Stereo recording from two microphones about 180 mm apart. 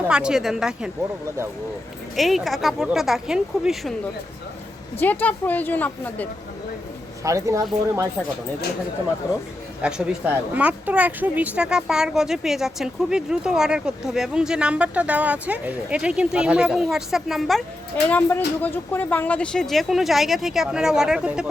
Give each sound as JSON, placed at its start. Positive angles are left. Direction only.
{"t": 0.1, "sound": "a woman's voice", "side_deg": -5}
{"t": 2.1, "sound": "a woman's voice", "side_deg": 0}
{"t": 4.9, "sound": "a woman's voice", "side_deg": 10}
{"t": 7.3, "sound": "speech", "side_deg": -15}
{"t": 9.8, "sound": "a woman's voice", "side_deg": -5}